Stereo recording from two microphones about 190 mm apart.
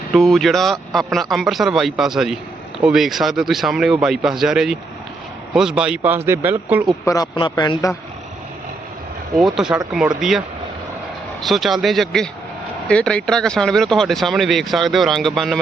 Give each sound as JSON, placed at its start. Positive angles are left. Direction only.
{"t": 0.1, "sound": "speech", "side_deg": 0}
{"t": 7.0, "sound": "a man's voice", "side_deg": 20}
{"t": 9.4, "sound": "speech", "side_deg": -5}
{"t": 11.4, "sound": "speech", "side_deg": 0}